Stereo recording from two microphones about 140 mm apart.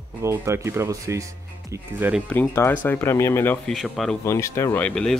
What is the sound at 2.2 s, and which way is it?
Speech, 15° left (ahead or behind).